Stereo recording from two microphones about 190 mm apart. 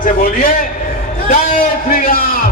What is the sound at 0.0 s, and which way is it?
Speech, 45° left (ahead or behind).